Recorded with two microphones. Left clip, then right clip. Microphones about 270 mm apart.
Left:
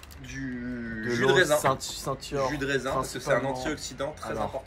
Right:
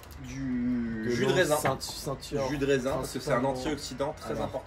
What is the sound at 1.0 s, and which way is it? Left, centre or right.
Speech, centre.